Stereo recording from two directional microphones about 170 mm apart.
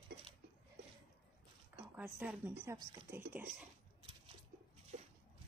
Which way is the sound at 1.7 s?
10° right (ahead or behind).